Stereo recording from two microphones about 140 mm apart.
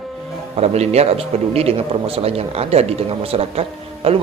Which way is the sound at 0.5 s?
50° right (ahead or behind).